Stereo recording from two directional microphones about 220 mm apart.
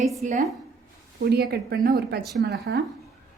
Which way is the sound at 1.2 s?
45° right (ahead or behind).